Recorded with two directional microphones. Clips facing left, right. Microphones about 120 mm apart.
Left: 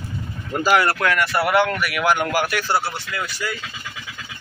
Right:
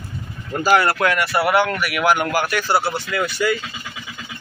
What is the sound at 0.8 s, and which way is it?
Speech, 20° right (ahead or behind).